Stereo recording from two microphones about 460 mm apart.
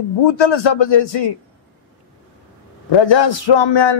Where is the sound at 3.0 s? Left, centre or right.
Left.